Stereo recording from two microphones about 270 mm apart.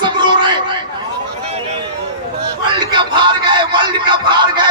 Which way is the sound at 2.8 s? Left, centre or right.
Centre.